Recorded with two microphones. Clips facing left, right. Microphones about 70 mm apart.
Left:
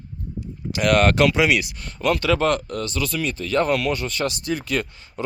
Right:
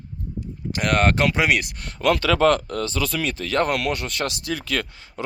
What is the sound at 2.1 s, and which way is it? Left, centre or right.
Speech, right.